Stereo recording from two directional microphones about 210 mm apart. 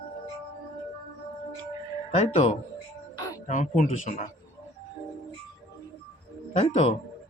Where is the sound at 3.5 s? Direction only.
35° left (ahead or behind).